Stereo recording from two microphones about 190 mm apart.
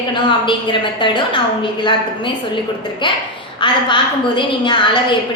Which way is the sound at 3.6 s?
25° left (ahead or behind).